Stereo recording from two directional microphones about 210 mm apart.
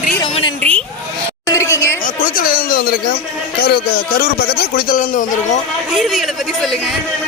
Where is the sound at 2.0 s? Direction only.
40° left (ahead or behind).